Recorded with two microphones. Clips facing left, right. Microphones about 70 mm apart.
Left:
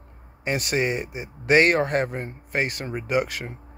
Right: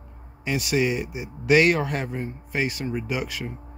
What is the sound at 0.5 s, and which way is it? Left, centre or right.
Speech, left.